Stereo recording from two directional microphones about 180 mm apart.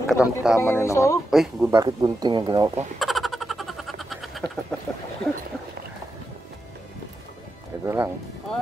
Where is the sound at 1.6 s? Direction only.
20° right (ahead or behind).